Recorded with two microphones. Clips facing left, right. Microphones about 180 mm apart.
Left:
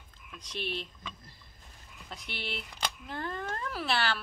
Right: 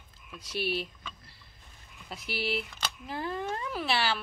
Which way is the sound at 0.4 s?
5° right (ahead or behind).